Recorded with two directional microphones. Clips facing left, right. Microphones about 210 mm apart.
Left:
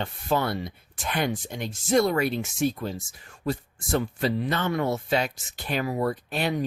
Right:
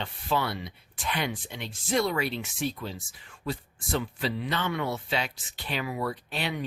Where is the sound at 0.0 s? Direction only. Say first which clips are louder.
Left 4 dB; 45° left (ahead or behind).